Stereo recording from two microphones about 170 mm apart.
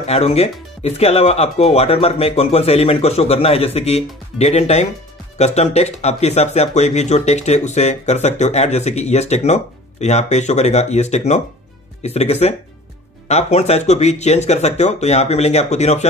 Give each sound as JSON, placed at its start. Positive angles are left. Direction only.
{"t": 0.0, "sound": "speech", "side_deg": 40}